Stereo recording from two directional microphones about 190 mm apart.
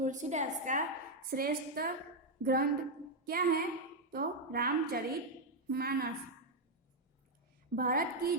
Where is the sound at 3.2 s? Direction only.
50° right (ahead or behind).